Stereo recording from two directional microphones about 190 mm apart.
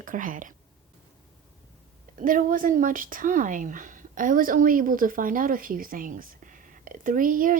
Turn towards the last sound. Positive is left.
turn(degrees=-45)  # may be behind; listen again after turning